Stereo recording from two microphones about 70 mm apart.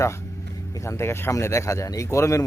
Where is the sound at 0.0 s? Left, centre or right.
Left.